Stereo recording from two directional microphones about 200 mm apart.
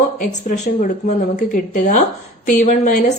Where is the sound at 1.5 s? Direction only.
40° left (ahead or behind).